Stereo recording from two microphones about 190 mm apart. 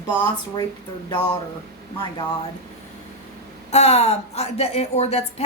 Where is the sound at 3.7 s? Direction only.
35° left (ahead or behind).